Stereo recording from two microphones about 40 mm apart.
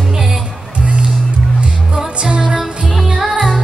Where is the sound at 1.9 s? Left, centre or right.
Right.